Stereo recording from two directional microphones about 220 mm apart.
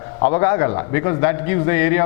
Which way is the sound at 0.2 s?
15° left (ahead or behind).